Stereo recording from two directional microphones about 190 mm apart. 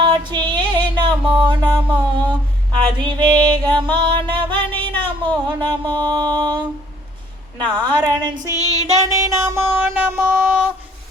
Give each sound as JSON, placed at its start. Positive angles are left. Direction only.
{"t": 0.0, "sound": "music", "side_deg": -25}
{"t": 4.9, "sound": "a sound", "side_deg": -25}
{"t": 7.6, "sound": "a woman's voice", "side_deg": -25}
{"t": 8.4, "sound": "female singing", "side_deg": 15}
{"t": 9.1, "sound": "music", "side_deg": -15}